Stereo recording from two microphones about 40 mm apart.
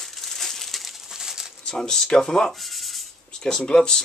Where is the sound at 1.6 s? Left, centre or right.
Centre.